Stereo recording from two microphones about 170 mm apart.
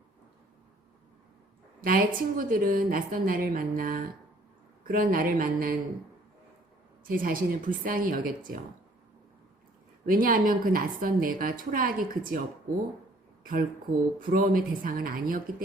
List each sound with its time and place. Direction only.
1.8 s a woman's voice: 60° right (ahead or behind)
7.1 s a woman's voice: 55° right (ahead or behind)
10.1 s a woman's voice: 55° right (ahead or behind)
13.4 s a woman's voice: 55° right (ahead or behind)